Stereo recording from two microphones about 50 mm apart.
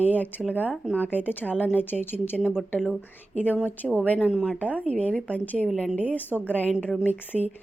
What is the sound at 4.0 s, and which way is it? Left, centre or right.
Speech, left.